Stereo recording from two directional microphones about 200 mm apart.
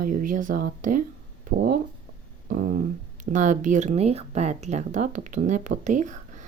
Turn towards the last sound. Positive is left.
turn(degrees=-40)  # may be behind; listen again after turning